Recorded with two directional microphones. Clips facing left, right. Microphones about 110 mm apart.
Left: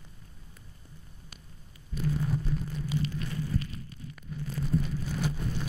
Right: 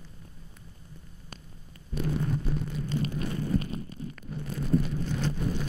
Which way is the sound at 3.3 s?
60° right (ahead or behind).